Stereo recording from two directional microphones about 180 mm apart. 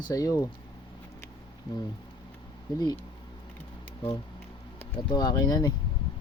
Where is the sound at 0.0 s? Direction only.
20° left (ahead or behind).